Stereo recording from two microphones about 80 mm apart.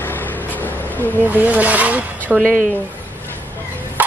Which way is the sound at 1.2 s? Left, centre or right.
Right.